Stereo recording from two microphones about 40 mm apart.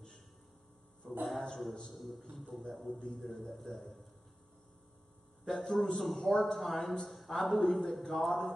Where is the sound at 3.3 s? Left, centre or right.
Centre.